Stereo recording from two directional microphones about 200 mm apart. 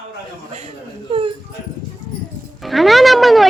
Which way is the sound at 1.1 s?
25° right (ahead or behind).